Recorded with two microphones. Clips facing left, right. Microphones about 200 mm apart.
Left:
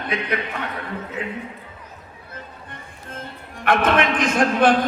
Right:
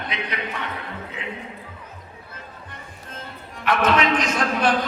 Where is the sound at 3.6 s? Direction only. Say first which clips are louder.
Left 1 dB; 55° left (ahead or behind).